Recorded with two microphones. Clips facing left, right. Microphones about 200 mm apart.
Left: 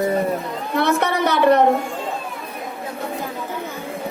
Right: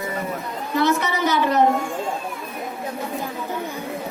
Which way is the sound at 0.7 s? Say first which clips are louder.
Left 2 dB; 60° left (ahead or behind).